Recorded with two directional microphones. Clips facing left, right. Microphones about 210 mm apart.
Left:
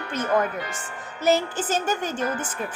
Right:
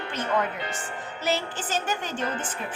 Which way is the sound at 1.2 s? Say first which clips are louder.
Left 7 dB; 45° left (ahead or behind).